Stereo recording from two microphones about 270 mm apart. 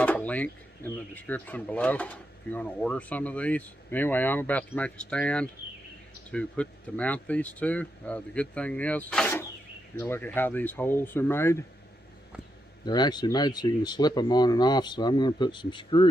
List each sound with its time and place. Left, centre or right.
0.0 s a sound: centre
1.1 s speech: centre
12.8 s speech: centre